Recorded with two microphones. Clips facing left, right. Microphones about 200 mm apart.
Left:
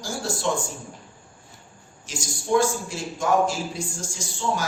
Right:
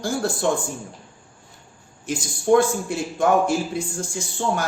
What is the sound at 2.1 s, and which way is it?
A man's voice, 55° right (ahead or behind).